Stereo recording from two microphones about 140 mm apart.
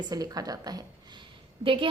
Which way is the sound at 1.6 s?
40° right (ahead or behind).